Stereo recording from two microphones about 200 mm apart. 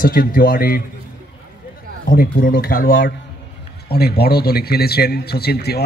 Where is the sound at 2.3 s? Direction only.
45° left (ahead or behind).